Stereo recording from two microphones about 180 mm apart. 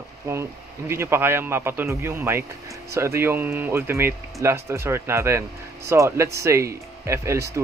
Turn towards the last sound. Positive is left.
turn(degrees=-15)  # may be behind; listen again after turning